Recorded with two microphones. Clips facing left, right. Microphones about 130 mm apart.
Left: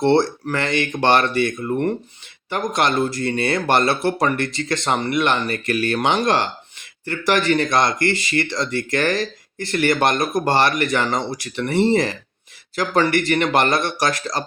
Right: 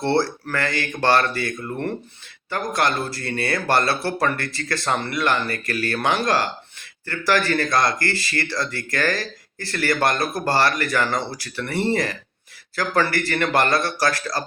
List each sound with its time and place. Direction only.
0.0 s speech: 20° left (ahead or behind)